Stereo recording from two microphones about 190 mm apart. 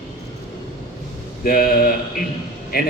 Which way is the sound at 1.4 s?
50° left (ahead or behind).